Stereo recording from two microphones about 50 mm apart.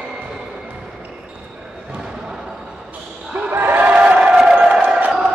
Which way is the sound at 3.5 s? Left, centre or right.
Right.